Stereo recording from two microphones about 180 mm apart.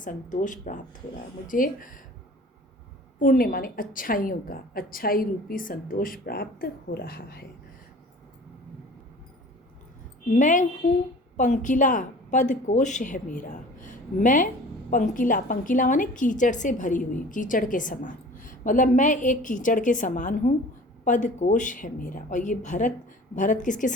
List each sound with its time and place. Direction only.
0.0 s a woman's voice: 45° left (ahead or behind)
3.2 s a woman's voice: 50° left (ahead or behind)
10.3 s a woman's voice: 45° left (ahead or behind)